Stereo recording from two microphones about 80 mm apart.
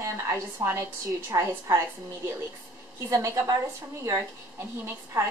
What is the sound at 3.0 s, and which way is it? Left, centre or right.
Speech, right.